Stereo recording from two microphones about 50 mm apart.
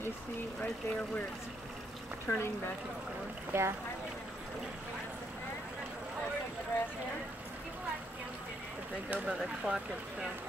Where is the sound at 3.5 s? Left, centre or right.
Right.